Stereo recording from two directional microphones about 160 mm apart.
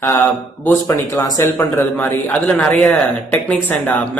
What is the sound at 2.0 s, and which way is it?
A man's voice, 10° left (ahead or behind).